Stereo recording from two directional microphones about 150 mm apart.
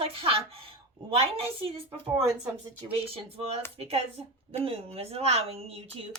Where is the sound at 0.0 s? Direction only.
40° right (ahead or behind).